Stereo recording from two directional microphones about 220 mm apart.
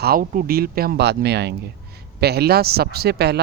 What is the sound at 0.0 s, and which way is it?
Speech, 40° right (ahead or behind).